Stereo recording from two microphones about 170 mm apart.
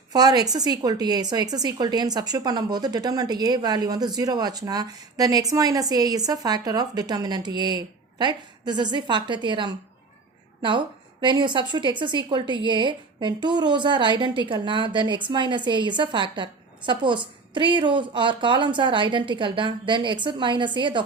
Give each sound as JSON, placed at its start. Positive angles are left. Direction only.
{"t": 0.1, "sound": "a woman's voice", "side_deg": -25}